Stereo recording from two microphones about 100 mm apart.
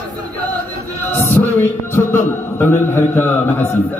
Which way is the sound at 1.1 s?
20° left (ahead or behind).